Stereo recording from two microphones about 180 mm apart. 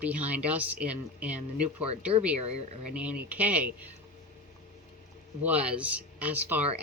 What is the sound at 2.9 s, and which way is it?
Speech, 5° right (ahead or behind).